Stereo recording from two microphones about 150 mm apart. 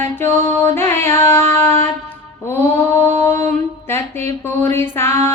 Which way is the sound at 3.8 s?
15° left (ahead or behind).